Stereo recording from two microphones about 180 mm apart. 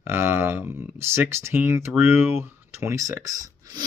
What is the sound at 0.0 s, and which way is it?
Speech, 15° right (ahead or behind).